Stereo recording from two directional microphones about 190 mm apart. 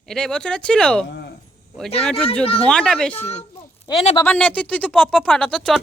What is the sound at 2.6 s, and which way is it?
Speech, 5° left (ahead or behind).